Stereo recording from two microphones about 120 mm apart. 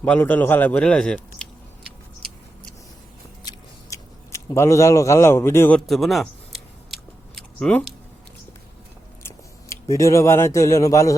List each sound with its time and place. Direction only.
0.0 s a man's voice: 15° left (ahead or behind)
1.4 s a sound: 5° left (ahead or behind)
3.4 s biting: 25° left (ahead or behind)
4.5 s a man's voice: 25° left (ahead or behind)
5.9 s a sound: centre (ahead or behind)
7.7 s a man's voice: 5° left (ahead or behind)
9.9 s a man's voice: 25° left (ahead or behind)